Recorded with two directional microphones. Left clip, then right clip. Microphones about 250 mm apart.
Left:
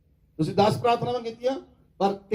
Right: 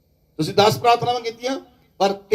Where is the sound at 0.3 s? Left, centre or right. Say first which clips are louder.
Right 6 dB; right.